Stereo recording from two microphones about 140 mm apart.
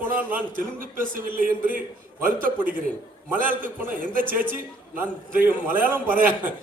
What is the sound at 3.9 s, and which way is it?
Speech, 85° right.